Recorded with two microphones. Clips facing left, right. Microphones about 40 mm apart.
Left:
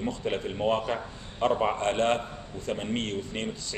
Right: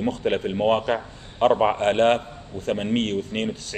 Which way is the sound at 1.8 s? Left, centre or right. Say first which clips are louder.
Right 7 dB; right.